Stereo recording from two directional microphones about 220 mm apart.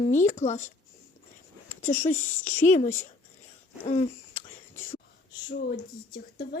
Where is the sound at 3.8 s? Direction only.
35° left (ahead or behind).